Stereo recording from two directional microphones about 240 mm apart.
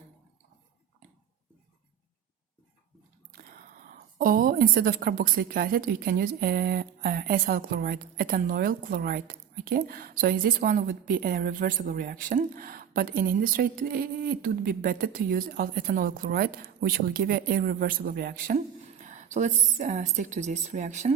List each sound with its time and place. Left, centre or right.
4.2 s a woman's voice: right